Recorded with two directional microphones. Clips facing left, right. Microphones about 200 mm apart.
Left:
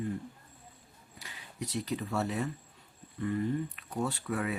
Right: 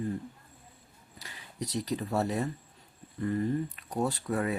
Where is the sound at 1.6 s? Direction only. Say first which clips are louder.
Right 2 dB; 40° right (ahead or behind).